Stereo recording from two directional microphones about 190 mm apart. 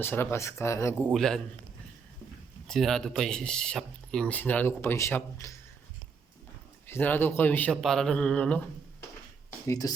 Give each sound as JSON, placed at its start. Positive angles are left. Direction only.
{"t": 0.0, "sound": "speech", "side_deg": 10}
{"t": 1.1, "sound": "speech", "side_deg": 0}
{"t": 2.6, "sound": "speech", "side_deg": 0}
{"t": 6.8, "sound": "speech", "side_deg": 10}
{"t": 9.6, "sound": "speech", "side_deg": 20}